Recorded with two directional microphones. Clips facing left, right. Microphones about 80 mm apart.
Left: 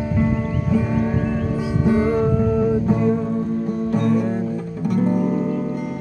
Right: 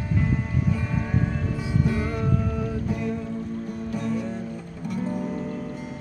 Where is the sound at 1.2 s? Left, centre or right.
Left.